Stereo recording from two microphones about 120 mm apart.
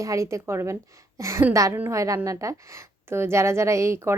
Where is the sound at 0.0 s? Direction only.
25° right (ahead or behind).